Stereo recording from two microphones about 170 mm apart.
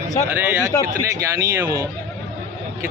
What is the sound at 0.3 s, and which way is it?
A man's voice, 10° right (ahead or behind).